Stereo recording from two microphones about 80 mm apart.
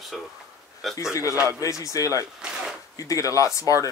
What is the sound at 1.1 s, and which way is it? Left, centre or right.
Speech, left.